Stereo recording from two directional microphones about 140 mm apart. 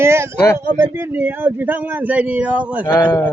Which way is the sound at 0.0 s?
20° right (ahead or behind).